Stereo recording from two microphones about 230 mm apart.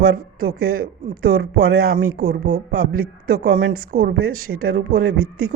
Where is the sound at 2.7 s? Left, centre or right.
Right.